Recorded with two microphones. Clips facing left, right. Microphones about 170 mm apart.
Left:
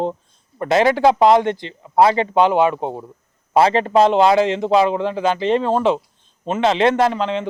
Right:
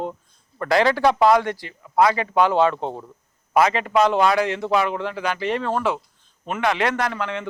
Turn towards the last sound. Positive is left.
turn(degrees=20)  # may be behind; listen again after turning